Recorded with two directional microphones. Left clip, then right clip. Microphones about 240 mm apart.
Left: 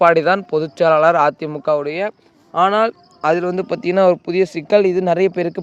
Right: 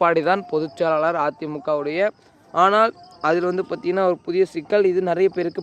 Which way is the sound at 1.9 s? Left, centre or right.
Centre.